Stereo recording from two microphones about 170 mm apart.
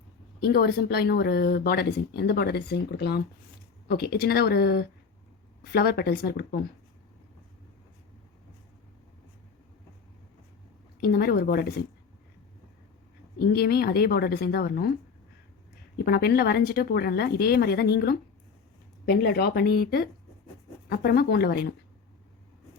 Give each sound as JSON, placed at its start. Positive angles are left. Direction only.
{"t": 0.4, "sound": "speech", "side_deg": 65}
{"t": 11.0, "sound": "speech", "side_deg": 70}
{"t": 13.4, "sound": "speech", "side_deg": 65}
{"t": 16.0, "sound": "speech", "side_deg": 65}